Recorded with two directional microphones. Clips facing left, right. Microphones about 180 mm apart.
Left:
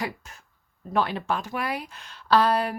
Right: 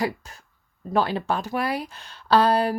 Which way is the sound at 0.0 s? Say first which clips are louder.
Right 6 dB; 35° right (ahead or behind).